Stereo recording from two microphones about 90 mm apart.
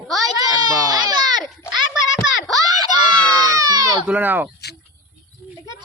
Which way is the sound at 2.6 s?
45° right (ahead or behind).